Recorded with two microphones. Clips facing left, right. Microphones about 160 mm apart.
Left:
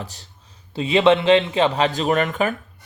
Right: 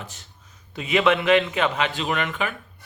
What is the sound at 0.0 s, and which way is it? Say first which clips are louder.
Speech: left 5 dB; 35° left (ahead or behind).